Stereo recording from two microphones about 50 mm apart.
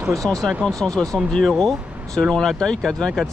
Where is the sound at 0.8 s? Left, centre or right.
Centre.